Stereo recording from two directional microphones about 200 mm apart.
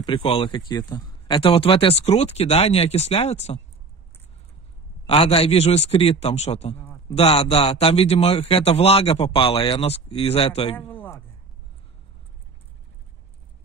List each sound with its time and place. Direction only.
0.0 s a man's voice: 25° left (ahead or behind)
5.0 s a man's voice: 30° left (ahead or behind)
10.9 s a sound: 10° left (ahead or behind)